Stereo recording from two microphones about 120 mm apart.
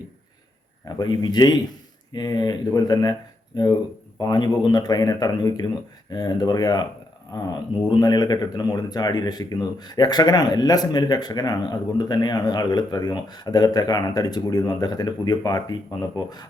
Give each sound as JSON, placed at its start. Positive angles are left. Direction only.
{"t": 0.9, "sound": "speech", "side_deg": 35}